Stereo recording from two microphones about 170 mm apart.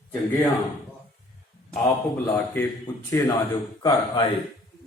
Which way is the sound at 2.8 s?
20° left (ahead or behind).